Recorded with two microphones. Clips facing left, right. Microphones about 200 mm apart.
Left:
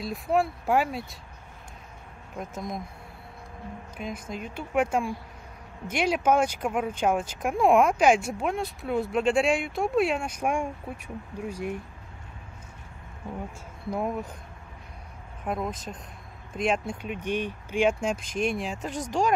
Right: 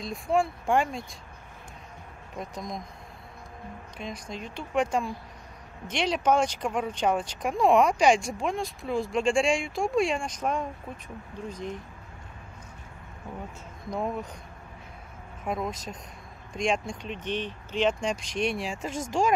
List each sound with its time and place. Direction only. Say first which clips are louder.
0.0 s speech: left 1 dB; 5° left (ahead or behind)
2.3 s speech: left 2 dB; 5° left (ahead or behind)
4.0 s speech: left 2 dB; 5° left (ahead or behind)
13.8 s speech: left 2 dB; 5° left (ahead or behind)
15.4 s speech: even; centre (ahead or behind)
18.9 s speech: even; 40° left (ahead or behind)